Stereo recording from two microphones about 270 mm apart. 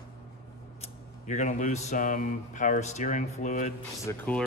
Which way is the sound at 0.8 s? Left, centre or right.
Left.